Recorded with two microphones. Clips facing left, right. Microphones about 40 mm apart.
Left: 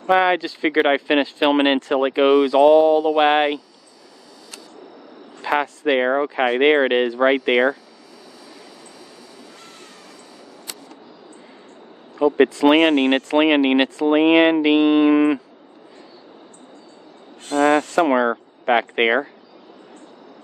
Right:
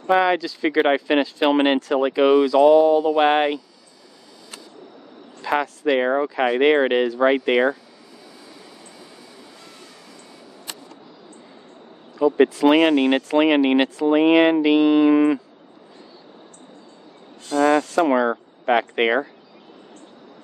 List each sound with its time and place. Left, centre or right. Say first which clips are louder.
0.0 s speech: left 1 dB; left
5.4 s speech: left 1 dB; left
12.4 s speech: left 1 dB; left
17.5 s speech: left 1 dB; left
18.2 s speech: left 1 dB; left